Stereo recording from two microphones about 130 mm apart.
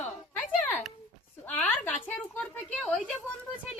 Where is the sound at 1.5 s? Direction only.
10° left (ahead or behind).